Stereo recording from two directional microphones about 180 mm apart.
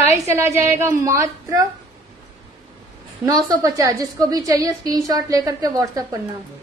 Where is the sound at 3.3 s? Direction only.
20° right (ahead or behind).